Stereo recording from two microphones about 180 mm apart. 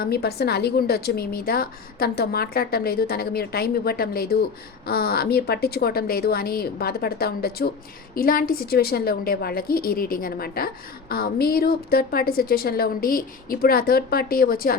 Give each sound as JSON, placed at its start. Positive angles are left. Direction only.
{"t": 0.0, "sound": "speech", "side_deg": 60}